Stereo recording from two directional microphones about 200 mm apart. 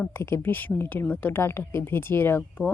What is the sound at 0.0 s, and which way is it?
Speech, 10° left (ahead or behind).